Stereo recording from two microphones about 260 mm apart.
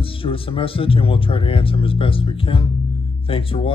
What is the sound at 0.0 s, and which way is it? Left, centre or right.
Speech, left.